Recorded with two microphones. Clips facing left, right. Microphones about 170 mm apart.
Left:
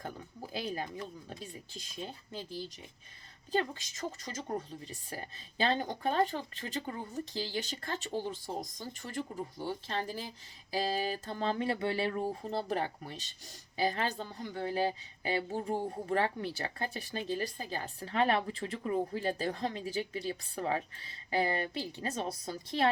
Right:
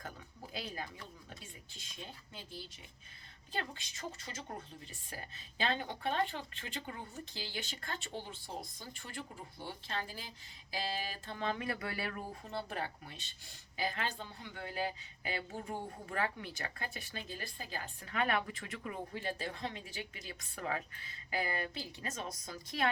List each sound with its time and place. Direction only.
0.5 s speech: 35° left (ahead or behind)